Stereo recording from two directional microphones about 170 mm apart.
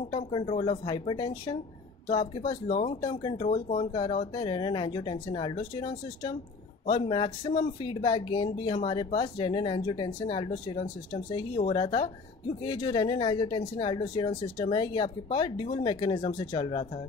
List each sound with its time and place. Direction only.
0.1 s speech: 30° left (ahead or behind)
3.4 s speech: 45° left (ahead or behind)
3.8 s speech: 35° left (ahead or behind)